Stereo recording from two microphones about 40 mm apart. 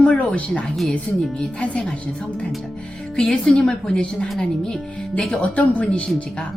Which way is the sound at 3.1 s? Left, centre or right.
Centre.